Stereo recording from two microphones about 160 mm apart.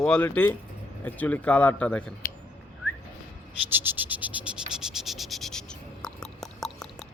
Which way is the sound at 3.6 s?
10° right (ahead or behind).